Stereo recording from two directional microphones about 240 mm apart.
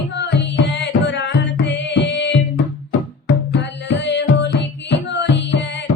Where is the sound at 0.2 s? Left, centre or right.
Left.